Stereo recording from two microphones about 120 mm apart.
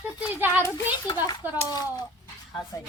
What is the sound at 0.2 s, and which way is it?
Speech, 15° right (ahead or behind).